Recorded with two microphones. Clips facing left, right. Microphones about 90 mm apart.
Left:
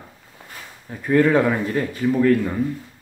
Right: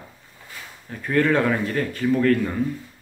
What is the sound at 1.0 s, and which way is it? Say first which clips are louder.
Speech: left 3 dB; 15° left (ahead or behind).